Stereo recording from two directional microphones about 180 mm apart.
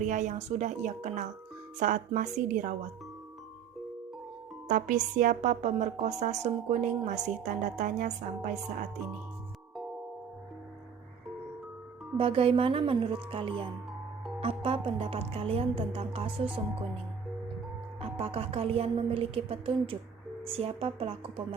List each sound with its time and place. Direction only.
0.0 s a woman's voice: 40° right (ahead or behind)
4.7 s a woman's voice: 45° right (ahead or behind)
12.1 s a woman's voice: 30° right (ahead or behind)
18.0 s a woman's voice: 35° right (ahead or behind)